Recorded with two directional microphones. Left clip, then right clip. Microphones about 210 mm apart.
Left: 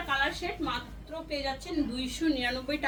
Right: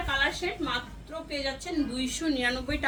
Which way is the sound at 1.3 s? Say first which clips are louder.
Right 1 dB; 20° right (ahead or behind).